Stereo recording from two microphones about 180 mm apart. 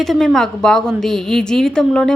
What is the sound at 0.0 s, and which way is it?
A woman's voice, centre (ahead or behind).